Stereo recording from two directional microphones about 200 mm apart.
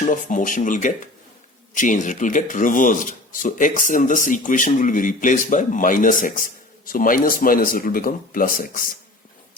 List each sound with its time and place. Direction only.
0.0 s speech: 40° left (ahead or behind)